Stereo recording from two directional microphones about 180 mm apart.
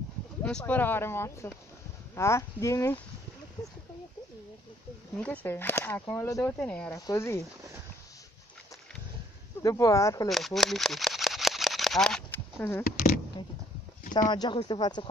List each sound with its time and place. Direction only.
0.4 s speech: 5° left (ahead or behind)
5.1 s speech: 10° left (ahead or behind)
6.9 s speech: 20° left (ahead or behind)
9.6 s speech: 20° left (ahead or behind)
10.2 s a sound: centre (ahead or behind)
14.3 s speech: 25° left (ahead or behind)